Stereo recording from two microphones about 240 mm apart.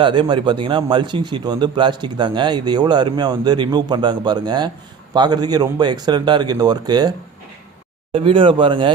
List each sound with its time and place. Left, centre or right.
0.0 s a man's voice: centre
8.1 s a man's voice: right